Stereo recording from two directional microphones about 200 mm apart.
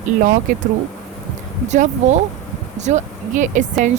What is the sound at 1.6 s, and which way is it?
Speech, 35° right (ahead or behind).